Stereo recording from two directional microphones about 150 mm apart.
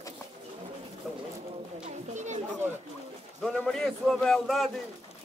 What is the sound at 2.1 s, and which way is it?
Speech, 50° right (ahead or behind).